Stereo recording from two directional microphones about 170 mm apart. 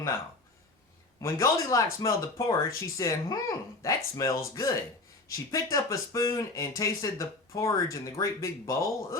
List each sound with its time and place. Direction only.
1.2 s speech: 15° left (ahead or behind)